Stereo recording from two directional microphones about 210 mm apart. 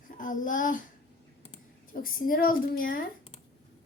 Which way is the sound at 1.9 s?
40° left (ahead or behind).